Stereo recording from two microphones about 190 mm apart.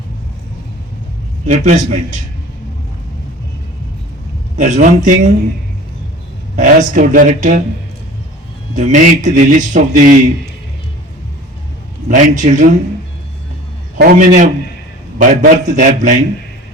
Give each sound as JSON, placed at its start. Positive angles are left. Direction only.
{"t": 1.5, "sound": "a man's voice", "side_deg": -40}
{"t": 4.5, "sound": "a man's voice", "side_deg": -40}
{"t": 6.6, "sound": "a man's voice", "side_deg": -40}
{"t": 8.7, "sound": "a man's voice", "side_deg": -40}
{"t": 12.0, "sound": "a man's voice", "side_deg": -40}
{"t": 14.0, "sound": "speech", "side_deg": -50}